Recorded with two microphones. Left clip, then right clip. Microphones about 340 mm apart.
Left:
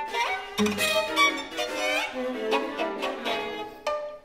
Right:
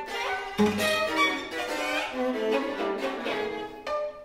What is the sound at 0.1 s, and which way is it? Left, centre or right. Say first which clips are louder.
Music: even; centre.